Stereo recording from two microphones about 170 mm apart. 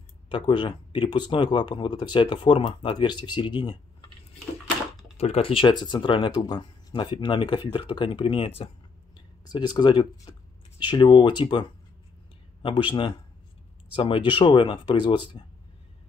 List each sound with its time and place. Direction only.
0.3 s speech: 30° left (ahead or behind)
5.1 s speech: 35° left (ahead or behind)
12.6 s speech: 30° left (ahead or behind)